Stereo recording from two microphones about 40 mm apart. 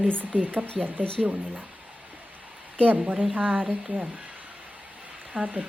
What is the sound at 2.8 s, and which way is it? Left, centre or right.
Speech, right.